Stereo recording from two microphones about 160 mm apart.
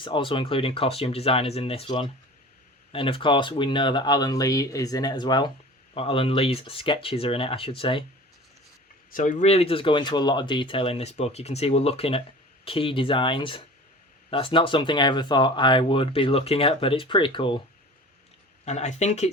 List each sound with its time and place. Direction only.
0.0 s speech: 30° left (ahead or behind)
9.1 s speech: 55° left (ahead or behind); by 17.6 s 30° left (ahead or behind)
18.6 s speech: 45° left (ahead or behind)